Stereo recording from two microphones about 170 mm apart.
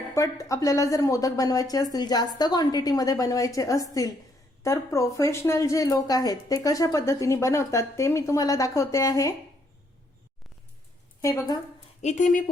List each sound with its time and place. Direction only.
0.1 s speech: 20° left (ahead or behind)
11.2 s speech: 20° left (ahead or behind)
12.0 s speech: 45° left (ahead or behind)